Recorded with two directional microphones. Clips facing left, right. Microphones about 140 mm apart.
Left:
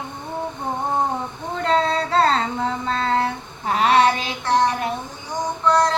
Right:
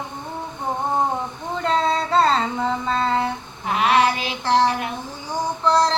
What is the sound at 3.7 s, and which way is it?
Child singing, 35° left (ahead or behind).